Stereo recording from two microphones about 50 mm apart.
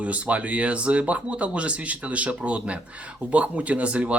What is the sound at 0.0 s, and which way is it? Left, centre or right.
Speech, right.